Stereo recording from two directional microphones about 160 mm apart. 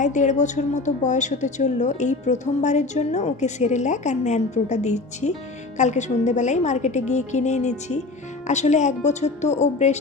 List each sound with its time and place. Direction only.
0.0 s a woman's voice: 50° left (ahead or behind)